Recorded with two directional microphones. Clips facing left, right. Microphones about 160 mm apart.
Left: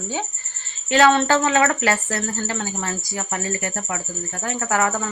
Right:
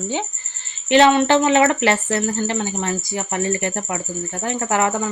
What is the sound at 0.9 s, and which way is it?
Speech, 25° right (ahead or behind).